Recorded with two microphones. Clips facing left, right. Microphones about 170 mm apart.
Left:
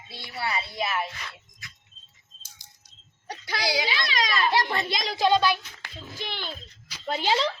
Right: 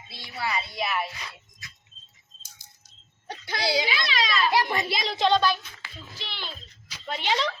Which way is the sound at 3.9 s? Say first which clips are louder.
Even; 45° left (ahead or behind).